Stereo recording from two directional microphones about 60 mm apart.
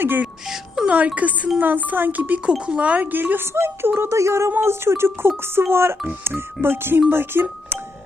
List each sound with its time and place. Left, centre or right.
0.0 s speech: right
0.4 s music: centre
0.9 s speech: right
2.5 s speech: centre; by 7.4 s right